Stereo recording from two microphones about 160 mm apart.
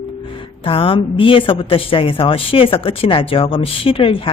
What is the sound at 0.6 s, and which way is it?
A woman's voice, 35° left (ahead or behind).